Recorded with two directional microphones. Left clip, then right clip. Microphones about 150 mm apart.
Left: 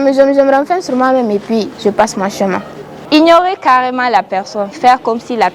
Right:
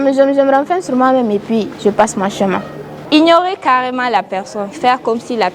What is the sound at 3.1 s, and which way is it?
A woman's voice, 50° left (ahead or behind).